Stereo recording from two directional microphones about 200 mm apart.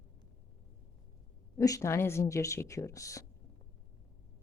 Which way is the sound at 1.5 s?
15° left (ahead or behind).